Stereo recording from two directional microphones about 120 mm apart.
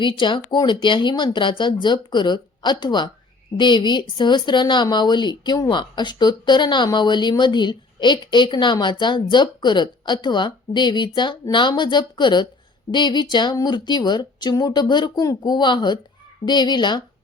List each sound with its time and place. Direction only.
0.0 s a woman's voice: 40° left (ahead or behind)